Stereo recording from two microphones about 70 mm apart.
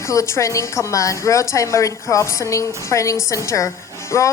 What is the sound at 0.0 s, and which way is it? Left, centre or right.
A woman's voice, left.